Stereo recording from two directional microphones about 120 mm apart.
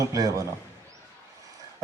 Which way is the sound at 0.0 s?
25° right (ahead or behind).